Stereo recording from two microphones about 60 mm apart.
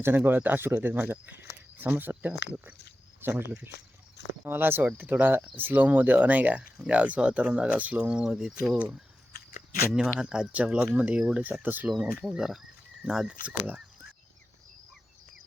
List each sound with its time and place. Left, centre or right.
0.0 s speech: right; by 8.8 s centre
10.2 s speech: centre
11.6 s speech: right
11.9 s speech: centre
13.4 s speech: right